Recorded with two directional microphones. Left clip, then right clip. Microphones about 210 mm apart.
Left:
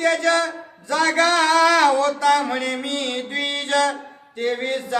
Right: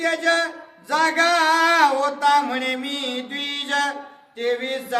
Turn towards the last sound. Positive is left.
turn(degrees=-15)  # may be behind; listen again after turning